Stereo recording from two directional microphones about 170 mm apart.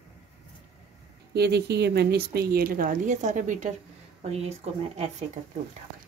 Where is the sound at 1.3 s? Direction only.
75° right (ahead or behind); by 5.0 s 40° right (ahead or behind).